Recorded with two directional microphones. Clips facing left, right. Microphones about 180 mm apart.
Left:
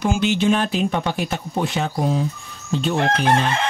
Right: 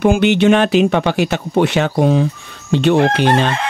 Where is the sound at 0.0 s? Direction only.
60° right (ahead or behind); by 2.2 s 80° right.